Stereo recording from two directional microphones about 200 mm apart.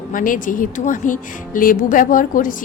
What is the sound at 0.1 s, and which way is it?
A woman's voice, 45° left (ahead or behind).